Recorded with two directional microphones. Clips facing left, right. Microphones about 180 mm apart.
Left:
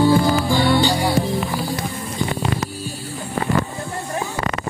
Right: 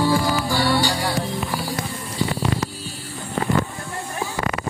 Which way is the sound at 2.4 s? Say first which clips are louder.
Left 1 dB; 20° left (ahead or behind).